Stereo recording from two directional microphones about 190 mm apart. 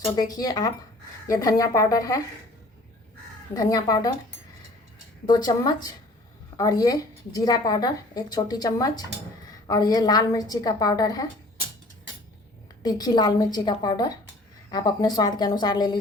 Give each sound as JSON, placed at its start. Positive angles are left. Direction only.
{"t": 0.2, "sound": "a woman's voice", "side_deg": 20}
{"t": 3.5, "sound": "a woman's voice", "side_deg": 20}
{"t": 5.2, "sound": "a woman's voice", "side_deg": 20}
{"t": 12.8, "sound": "a woman's voice", "side_deg": 20}